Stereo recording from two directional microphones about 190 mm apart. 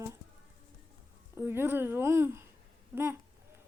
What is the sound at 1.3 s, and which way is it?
A woman's voice, 10° right (ahead or behind).